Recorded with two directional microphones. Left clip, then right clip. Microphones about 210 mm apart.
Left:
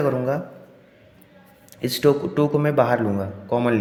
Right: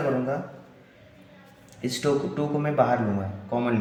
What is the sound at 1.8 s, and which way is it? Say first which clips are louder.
A man's voice: left 6 dB; 55° left (ahead or behind).